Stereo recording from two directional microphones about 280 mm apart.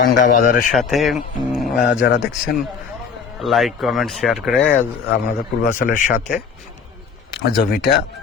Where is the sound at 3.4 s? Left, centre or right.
Centre.